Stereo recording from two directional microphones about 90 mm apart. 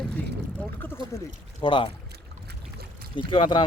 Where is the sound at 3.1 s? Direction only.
70° left (ahead or behind).